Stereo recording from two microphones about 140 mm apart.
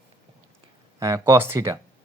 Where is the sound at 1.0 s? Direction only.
20° right (ahead or behind).